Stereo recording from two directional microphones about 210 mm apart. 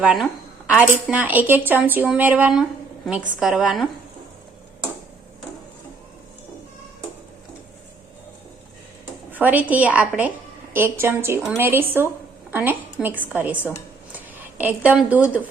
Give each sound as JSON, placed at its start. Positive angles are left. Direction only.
{"t": 0.0, "sound": "speech", "side_deg": 0}
{"t": 9.3, "sound": "a woman's voice", "side_deg": -10}